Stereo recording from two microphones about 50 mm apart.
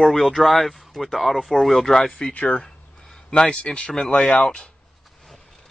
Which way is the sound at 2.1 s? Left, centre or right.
Centre.